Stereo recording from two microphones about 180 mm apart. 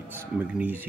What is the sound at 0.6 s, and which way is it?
Speech, 10° right (ahead or behind).